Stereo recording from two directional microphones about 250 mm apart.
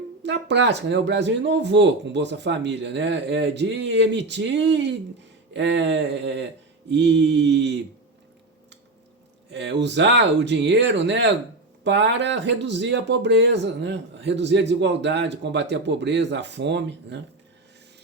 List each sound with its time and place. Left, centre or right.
0.2 s speech: right
9.5 s speech: right